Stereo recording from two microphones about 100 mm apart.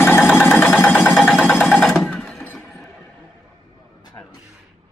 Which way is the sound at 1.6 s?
10° left (ahead or behind).